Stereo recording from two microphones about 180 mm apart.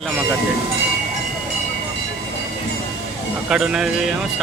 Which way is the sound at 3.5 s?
5° right (ahead or behind).